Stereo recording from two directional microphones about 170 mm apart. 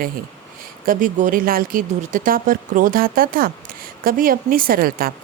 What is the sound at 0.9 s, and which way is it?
A woman's voice, 50° right (ahead or behind).